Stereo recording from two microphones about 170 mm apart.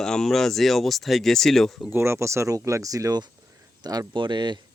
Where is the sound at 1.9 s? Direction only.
15° right (ahead or behind).